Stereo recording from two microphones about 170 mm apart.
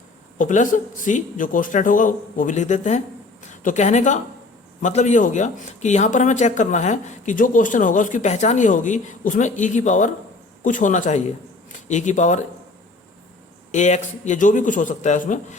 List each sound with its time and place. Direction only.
0.3 s speech: 50° left (ahead or behind)
13.7 s speech: 45° left (ahead or behind)